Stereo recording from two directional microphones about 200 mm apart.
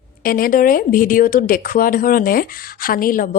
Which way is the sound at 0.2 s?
45° left (ahead or behind).